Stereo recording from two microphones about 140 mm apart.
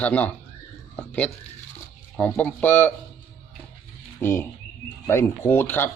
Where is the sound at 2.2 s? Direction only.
10° left (ahead or behind).